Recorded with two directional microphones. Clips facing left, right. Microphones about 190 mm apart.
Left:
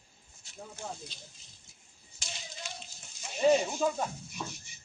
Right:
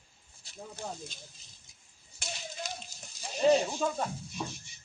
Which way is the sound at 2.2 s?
60° right (ahead or behind).